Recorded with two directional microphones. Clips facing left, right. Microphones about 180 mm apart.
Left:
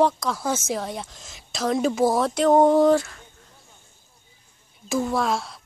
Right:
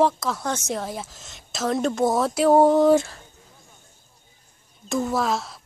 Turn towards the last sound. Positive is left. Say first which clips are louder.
# even
turn(degrees=0)  # may be behind; listen again after turning